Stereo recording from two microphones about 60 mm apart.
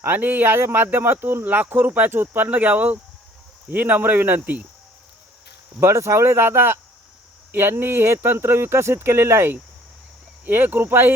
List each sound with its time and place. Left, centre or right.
0.0 s speech: right
5.8 s speech: right
10.4 s speech: right